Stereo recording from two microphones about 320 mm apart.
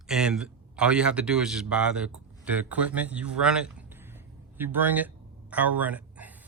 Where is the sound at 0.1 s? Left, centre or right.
Centre.